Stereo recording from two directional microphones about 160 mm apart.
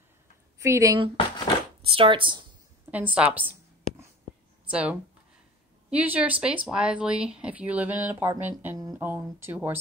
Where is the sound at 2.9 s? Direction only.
10° right (ahead or behind).